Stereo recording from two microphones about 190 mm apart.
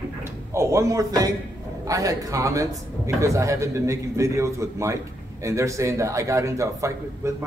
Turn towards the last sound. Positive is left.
turn(degrees=-15)  # may be behind; listen again after turning